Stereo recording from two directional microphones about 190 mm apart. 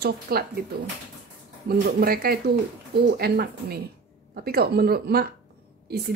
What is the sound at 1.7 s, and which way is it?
Speech, 55° right (ahead or behind).